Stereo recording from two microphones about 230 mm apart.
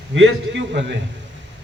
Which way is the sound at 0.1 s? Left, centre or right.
Right.